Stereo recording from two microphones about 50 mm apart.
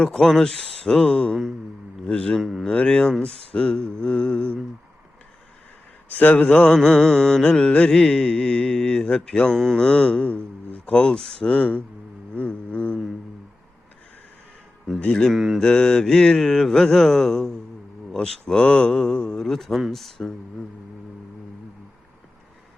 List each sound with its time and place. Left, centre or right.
0.0 s speech: centre
2.4 s speech: centre
2.6 s speech: centre
6.1 s speech: left
6.4 s speech: left
11.4 s speech: left
14.9 s speech: centre
15.3 s mantra: centre
15.6 s speech: centre